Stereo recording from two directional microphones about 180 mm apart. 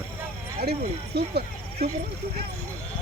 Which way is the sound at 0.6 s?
60° right (ahead or behind).